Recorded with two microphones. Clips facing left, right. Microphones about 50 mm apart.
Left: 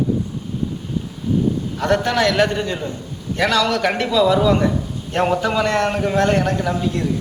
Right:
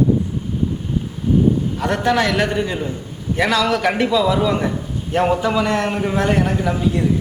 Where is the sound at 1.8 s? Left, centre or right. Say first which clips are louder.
Left 1 dB; centre.